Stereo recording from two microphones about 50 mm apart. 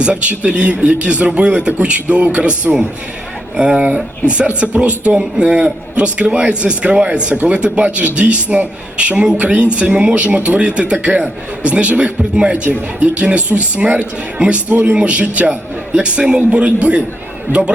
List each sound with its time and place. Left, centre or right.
0.0 s a man's voice: right